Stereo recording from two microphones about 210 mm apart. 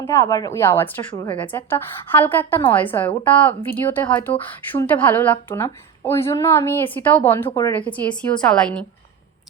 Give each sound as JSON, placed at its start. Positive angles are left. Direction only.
{"t": 0.0, "sound": "a woman's voice", "side_deg": 15}
{"t": 1.1, "sound": "speech", "side_deg": 25}
{"t": 1.5, "sound": "a woman's voice", "side_deg": 10}